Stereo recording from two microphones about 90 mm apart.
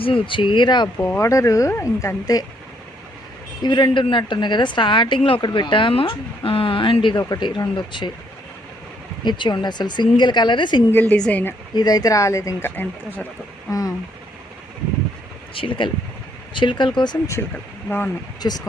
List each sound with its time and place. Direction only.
0.0 s a woman's voice: 75° left (ahead or behind); by 0.9 s 60° left (ahead or behind)
0.9 s speech: 25° left (ahead or behind)
3.6 s a woman's voice: 60° left (ahead or behind)
9.2 s a woman's voice: 55° left (ahead or behind)
11.2 s speech: 15° left (ahead or behind)
11.7 s speech: 45° left (ahead or behind)
12.7 s speech: 20° left (ahead or behind)
13.7 s a sound: 40° left (ahead or behind)
15.5 s a woman's voice: 70° left (ahead or behind)
17.8 s speech: 20° left (ahead or behind)
18.4 s speech: 50° left (ahead or behind)